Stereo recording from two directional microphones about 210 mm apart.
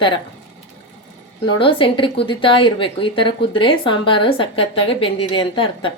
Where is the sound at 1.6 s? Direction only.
25° left (ahead or behind).